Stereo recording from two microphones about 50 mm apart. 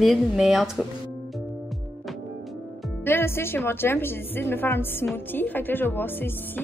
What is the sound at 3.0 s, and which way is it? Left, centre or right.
A woman's voice, left.